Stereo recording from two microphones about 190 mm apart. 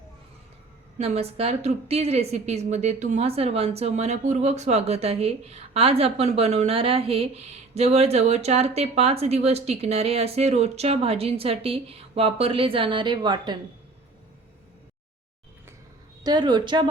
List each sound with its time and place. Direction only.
0.9 s a woman's voice: 35° right (ahead or behind)
16.2 s a woman's voice: 25° right (ahead or behind)